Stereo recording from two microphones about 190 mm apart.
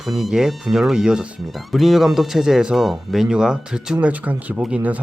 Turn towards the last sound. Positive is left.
turn(degrees=-5)  # may be behind; listen again after turning